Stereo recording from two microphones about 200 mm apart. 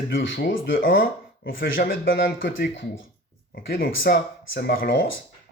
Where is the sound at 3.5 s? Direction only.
50° left (ahead or behind).